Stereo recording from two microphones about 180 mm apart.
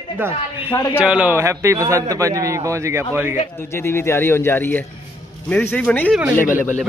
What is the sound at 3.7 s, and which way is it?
Speech, 15° left (ahead or behind).